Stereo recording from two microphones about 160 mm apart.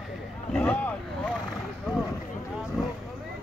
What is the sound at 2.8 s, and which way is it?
Vehicle, centre (ahead or behind).